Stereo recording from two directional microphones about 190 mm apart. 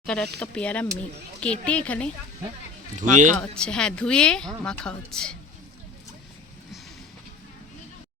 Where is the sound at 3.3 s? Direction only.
5° left (ahead or behind).